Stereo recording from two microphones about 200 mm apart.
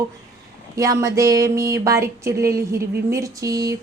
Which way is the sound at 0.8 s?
15° right (ahead or behind).